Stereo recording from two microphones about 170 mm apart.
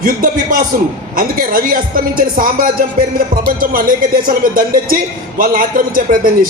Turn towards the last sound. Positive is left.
turn(degrees=-55)  # may be behind; listen again after turning